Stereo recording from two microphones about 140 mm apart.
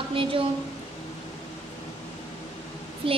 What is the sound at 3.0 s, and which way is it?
Speech, 40° right (ahead or behind).